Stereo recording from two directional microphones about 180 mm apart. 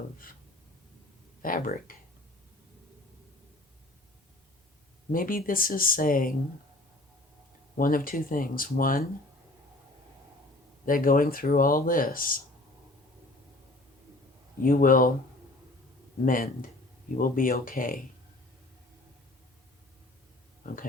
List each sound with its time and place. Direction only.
1.4 s speech: 50° left (ahead or behind)
5.1 s speech: 50° left (ahead or behind)
7.8 s speech: 50° left (ahead or behind)
10.8 s speech: 50° left (ahead or behind)
14.6 s speech: 50° left (ahead or behind)
16.2 s speech: 50° left (ahead or behind)
20.7 s speech: 50° left (ahead or behind)